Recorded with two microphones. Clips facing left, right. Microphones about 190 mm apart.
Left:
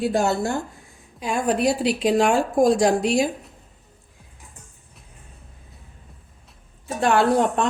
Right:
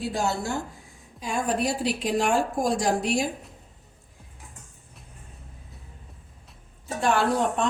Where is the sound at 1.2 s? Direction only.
70° left (ahead or behind).